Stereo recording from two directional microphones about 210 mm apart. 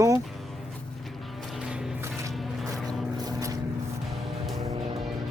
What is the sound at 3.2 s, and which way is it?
Vehicle, 15° right (ahead or behind).